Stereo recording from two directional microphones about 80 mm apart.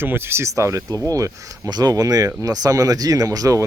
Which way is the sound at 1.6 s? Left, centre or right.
Right.